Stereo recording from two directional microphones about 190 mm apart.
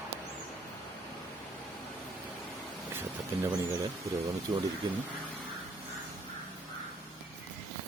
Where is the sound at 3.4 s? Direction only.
20° right (ahead or behind).